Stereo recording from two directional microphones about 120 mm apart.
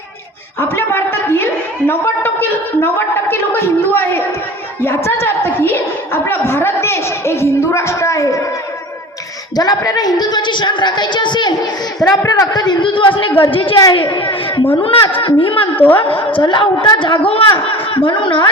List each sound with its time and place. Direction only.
0.6 s a woman's voice: 20° left (ahead or behind)
5.2 s a woman's voice: 20° left (ahead or behind)
9.6 s a woman's voice: 30° left (ahead or behind)
12.0 s a woman's voice: 25° left (ahead or behind); by 15.7 s 45° left (ahead or behind)
15.7 s a woman's voice: 15° left (ahead or behind)
16.0 s a man's voice: 50° left (ahead or behind)